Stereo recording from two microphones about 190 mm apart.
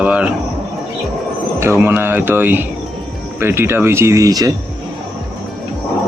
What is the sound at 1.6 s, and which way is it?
Speech, 10° right (ahead or behind).